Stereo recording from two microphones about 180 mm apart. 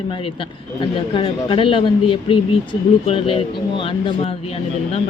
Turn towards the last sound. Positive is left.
turn(degrees=35)  # may be behind; listen again after turning